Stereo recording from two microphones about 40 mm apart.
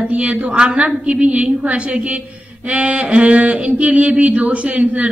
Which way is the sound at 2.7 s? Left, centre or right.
Right.